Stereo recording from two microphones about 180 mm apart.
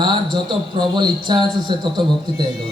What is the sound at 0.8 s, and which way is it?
A man's voice, 25° right (ahead or behind).